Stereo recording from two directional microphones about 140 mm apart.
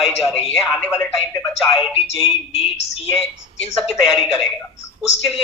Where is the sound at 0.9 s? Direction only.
20° left (ahead or behind).